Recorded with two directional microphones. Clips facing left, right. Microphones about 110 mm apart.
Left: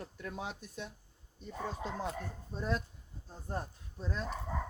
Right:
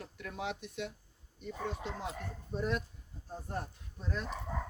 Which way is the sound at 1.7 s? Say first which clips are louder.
Left 2 dB; 35° left (ahead or behind).